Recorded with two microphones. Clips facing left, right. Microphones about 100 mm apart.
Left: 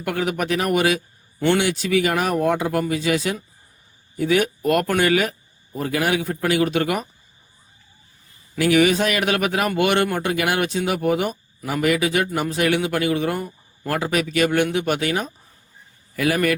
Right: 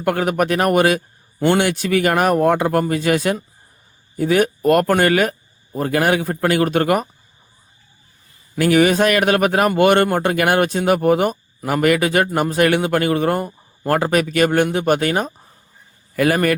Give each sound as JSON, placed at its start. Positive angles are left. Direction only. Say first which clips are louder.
{"t": 0.0, "sound": "a man's voice", "louder": "right 5 dB", "side_deg": -45}
{"t": 8.5, "sound": "a man's voice", "louder": "right 3 dB", "side_deg": -45}